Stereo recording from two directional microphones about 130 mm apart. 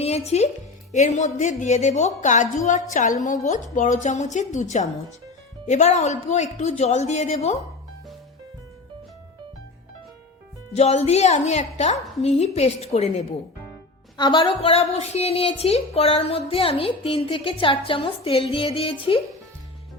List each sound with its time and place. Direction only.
0.3 s a woman's voice: 55° left (ahead or behind)
0.9 s a woman's voice: 65° left (ahead or behind)
10.8 s a woman's voice: 55° left (ahead or behind)
14.2 s a woman's voice: 35° left (ahead or behind)